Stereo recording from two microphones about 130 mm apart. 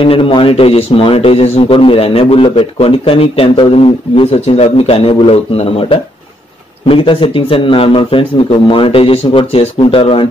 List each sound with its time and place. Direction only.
0.0 s speech: 40° left (ahead or behind)